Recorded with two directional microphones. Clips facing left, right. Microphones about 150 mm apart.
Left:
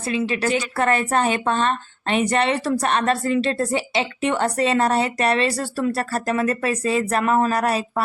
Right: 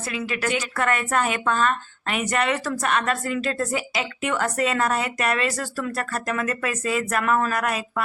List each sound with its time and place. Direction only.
0.1 s a woman's voice: 25° left (ahead or behind)